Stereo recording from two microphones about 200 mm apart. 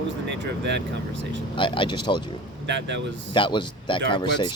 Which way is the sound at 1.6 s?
25° left (ahead or behind).